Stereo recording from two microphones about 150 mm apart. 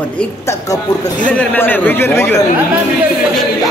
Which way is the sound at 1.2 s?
10° left (ahead or behind).